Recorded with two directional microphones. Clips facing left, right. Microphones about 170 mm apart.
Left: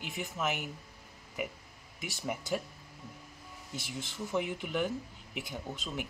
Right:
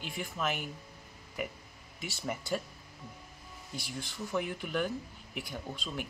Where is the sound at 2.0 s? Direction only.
15° left (ahead or behind).